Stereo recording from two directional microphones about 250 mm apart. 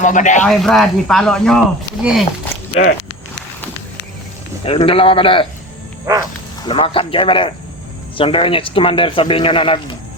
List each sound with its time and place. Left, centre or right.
0.0 s speech: left
0.4 s speech: centre
4.6 s speech: left
6.7 s speech: left